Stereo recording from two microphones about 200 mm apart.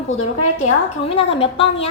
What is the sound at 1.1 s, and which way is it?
Speech, 30° left (ahead or behind).